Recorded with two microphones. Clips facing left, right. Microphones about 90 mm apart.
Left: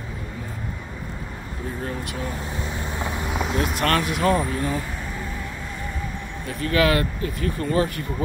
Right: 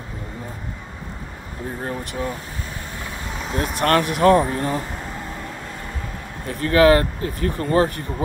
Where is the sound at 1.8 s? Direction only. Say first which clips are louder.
Right 4 dB; 40° right (ahead or behind).